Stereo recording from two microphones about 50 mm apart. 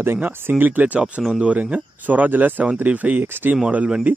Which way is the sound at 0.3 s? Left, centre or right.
Right.